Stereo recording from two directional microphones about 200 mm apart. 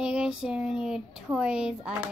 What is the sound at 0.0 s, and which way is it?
Speech, 5° right (ahead or behind).